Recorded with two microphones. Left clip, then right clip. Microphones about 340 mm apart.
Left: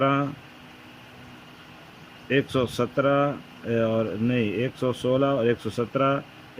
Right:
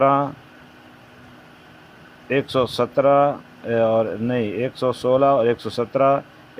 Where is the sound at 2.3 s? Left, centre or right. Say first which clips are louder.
Right 4 dB; centre.